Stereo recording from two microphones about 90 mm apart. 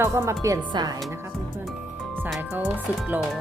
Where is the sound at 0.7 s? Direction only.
45° right (ahead or behind).